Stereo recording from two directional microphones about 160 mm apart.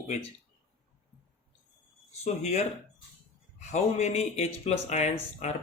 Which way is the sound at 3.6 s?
45° left (ahead or behind).